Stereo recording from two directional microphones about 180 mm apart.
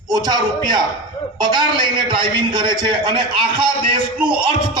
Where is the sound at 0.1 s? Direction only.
20° right (ahead or behind).